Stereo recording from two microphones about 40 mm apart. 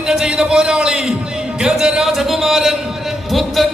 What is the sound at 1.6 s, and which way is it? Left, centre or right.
Music, centre.